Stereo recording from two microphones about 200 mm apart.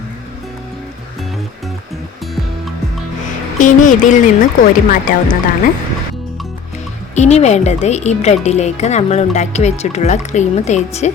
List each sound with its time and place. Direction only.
3.6 s a woman's voice: 40° left (ahead or behind)
7.2 s a woman's voice: 35° left (ahead or behind)